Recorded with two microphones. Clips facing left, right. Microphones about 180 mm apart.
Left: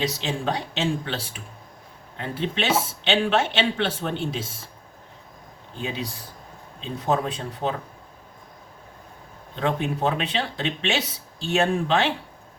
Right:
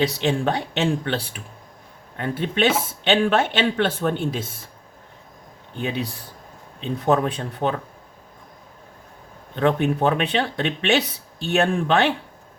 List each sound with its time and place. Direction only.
0.0 s speech: 60° right (ahead or behind)
5.8 s speech: 60° right (ahead or behind)
9.6 s speech: 60° right (ahead or behind)